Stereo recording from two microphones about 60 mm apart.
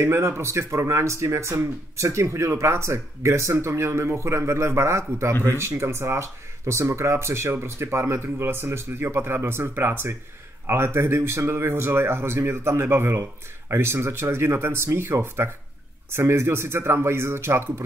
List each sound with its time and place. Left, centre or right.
0.0 s speech: right